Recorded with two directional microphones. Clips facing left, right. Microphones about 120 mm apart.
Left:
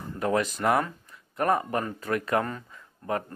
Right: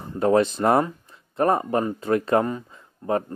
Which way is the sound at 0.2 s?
30° right (ahead or behind).